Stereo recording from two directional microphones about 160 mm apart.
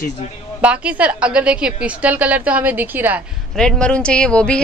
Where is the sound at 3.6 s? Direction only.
5° left (ahead or behind).